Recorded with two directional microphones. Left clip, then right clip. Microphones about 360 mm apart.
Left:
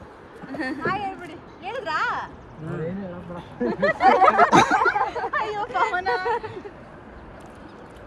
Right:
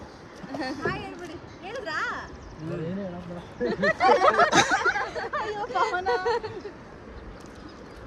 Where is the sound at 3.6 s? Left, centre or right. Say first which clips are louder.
Left 3 dB; centre.